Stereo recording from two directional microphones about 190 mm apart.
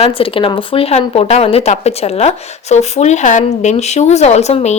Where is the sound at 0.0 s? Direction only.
30° left (ahead or behind).